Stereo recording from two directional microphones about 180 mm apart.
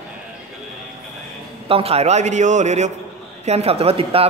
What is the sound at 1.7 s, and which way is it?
A man's voice, 35° right (ahead or behind).